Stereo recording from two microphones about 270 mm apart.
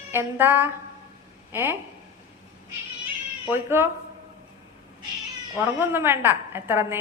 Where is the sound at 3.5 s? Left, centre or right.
Centre.